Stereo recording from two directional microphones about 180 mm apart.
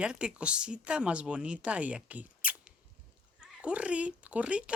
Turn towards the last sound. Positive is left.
turn(degrees=-5)  # may be behind; listen again after turning